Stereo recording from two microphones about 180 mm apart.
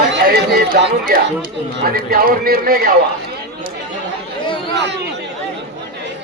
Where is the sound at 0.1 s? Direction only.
70° right (ahead or behind).